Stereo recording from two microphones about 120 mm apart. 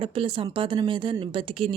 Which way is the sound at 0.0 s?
50° right (ahead or behind).